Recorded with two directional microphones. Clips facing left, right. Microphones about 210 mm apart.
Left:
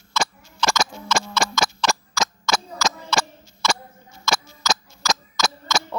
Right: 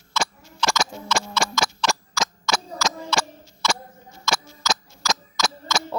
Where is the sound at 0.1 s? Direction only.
40° left (ahead or behind).